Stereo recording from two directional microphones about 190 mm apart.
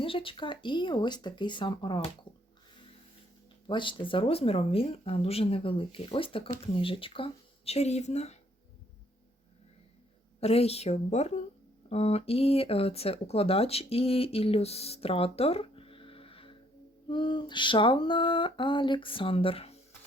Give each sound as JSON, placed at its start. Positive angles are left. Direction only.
{"t": 0.0, "sound": "speech", "side_deg": 30}
{"t": 3.7, "sound": "speech", "side_deg": 25}
{"t": 10.4, "sound": "speech", "side_deg": 35}